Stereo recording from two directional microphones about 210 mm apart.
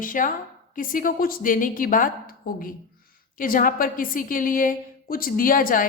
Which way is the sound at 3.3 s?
40° left (ahead or behind).